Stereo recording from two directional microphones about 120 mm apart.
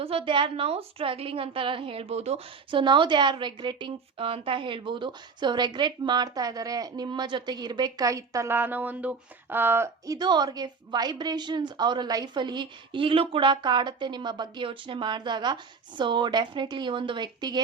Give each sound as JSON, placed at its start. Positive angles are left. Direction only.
{"t": 0.0, "sound": "a woman's voice", "side_deg": -50}
{"t": 10.2, "sound": "a woman's voice", "side_deg": -35}